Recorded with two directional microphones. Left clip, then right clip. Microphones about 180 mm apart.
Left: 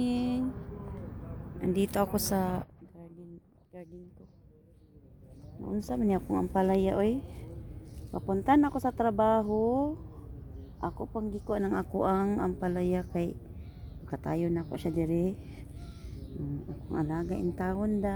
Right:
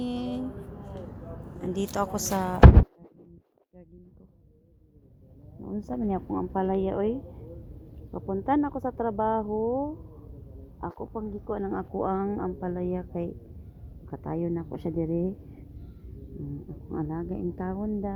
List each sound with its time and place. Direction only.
0.0 s a sound: 20° left (ahead or behind)
1.6 s a woman's voice: 20° left (ahead or behind)
5.9 s a woman's voice: 30° left (ahead or behind)
14.3 s speech: 15° left (ahead or behind)
16.9 s speech: 10° left (ahead or behind)
17.7 s a woman's voice: 20° left (ahead or behind)